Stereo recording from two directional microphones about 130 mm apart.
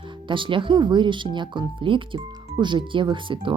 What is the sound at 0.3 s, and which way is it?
Speech, 40° right (ahead or behind).